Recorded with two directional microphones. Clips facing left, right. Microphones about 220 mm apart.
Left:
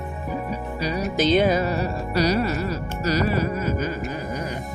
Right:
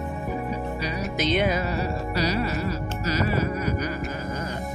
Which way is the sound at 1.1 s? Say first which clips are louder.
Left 5 dB; 30° left (ahead or behind).